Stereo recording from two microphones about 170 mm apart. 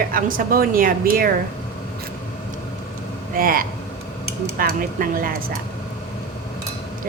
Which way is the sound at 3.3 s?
55° right (ahead or behind).